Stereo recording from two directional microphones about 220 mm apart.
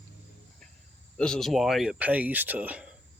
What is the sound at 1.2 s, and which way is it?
Speech, centre (ahead or behind).